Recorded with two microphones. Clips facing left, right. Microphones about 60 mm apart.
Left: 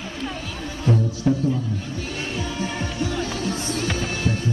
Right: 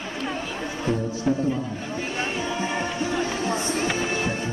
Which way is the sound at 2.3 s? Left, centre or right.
Right.